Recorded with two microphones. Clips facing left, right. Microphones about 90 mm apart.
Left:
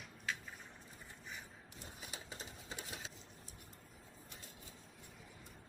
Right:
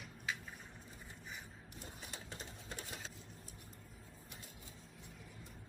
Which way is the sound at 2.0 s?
5° left (ahead or behind).